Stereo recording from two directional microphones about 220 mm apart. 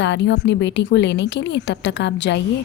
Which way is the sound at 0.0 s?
55° left (ahead or behind).